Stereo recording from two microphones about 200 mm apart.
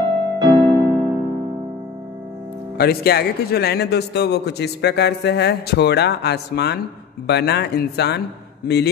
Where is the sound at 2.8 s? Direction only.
50° left (ahead or behind).